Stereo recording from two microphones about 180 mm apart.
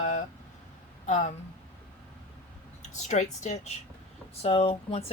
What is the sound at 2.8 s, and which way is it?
Speech, 40° left (ahead or behind).